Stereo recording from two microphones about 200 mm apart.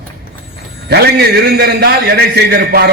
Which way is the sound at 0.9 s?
55° right (ahead or behind).